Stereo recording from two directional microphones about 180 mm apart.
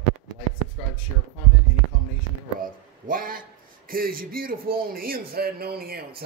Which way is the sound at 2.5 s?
50° right (ahead or behind).